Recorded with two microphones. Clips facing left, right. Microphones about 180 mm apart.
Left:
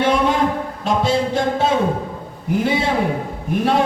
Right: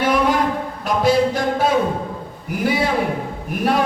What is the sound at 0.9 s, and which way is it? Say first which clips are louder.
Music: right 2 dB; 25° left (ahead or behind).